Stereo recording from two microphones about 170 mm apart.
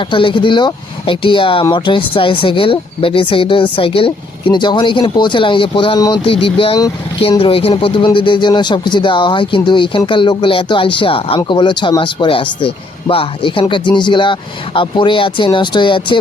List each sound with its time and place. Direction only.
0.0 s speech: 30° left (ahead or behind)